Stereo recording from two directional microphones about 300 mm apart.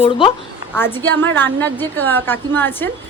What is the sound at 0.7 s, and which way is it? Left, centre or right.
A woman's voice, centre.